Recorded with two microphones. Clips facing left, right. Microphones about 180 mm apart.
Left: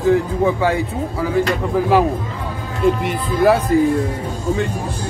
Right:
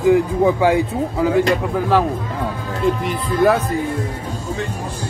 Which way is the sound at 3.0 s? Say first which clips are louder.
Even; 5° left (ahead or behind).